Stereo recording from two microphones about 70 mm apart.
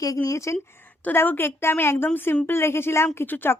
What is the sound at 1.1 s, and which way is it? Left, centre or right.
A woman's voice, left.